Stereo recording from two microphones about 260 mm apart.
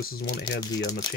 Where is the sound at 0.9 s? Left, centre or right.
Centre.